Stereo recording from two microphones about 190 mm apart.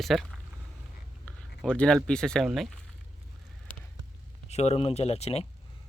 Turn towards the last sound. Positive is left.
turn(degrees=35)  # may be behind; listen again after turning